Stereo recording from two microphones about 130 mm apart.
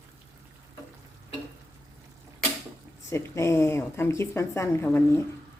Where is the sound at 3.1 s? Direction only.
20° left (ahead or behind).